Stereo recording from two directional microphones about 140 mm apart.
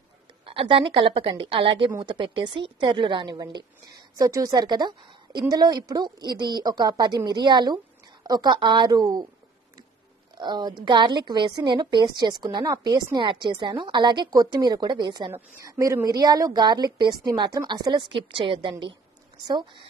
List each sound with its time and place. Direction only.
0.5 s a woman's voice: 40° right (ahead or behind)
10.3 s a woman's voice: 30° right (ahead or behind)